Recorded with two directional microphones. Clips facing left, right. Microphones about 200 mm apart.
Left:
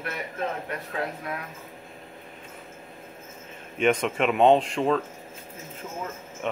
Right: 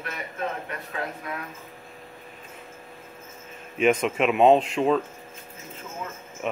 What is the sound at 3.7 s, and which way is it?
Speech, 5° right (ahead or behind).